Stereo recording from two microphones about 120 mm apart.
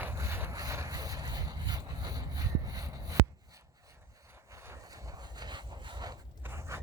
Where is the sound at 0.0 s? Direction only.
20° right (ahead or behind).